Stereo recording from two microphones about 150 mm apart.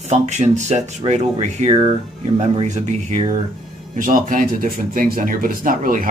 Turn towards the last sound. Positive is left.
turn(degrees=-65)  # may be behind; listen again after turning